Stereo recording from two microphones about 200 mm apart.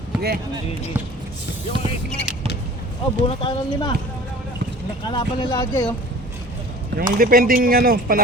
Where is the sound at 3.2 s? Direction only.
25° left (ahead or behind).